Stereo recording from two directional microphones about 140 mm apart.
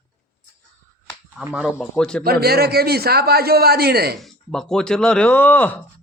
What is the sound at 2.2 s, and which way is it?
A man's voice, 90° right.